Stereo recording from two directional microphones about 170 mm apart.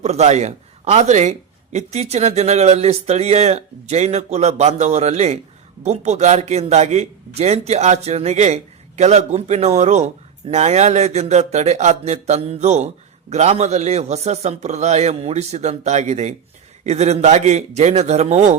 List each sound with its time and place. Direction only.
0.0 s a man's voice: 40° right (ahead or behind)